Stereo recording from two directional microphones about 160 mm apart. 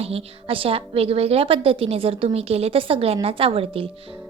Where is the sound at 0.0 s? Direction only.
35° right (ahead or behind).